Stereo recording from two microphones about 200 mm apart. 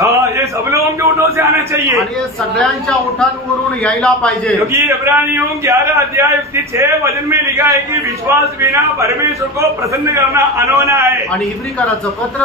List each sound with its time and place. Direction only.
0.0 s a sound: 15° right (ahead or behind)
2.5 s a woman's voice: centre (ahead or behind)
4.6 s a man's voice: 15° right (ahead or behind)
10.1 s a man's voice: 15° right (ahead or behind)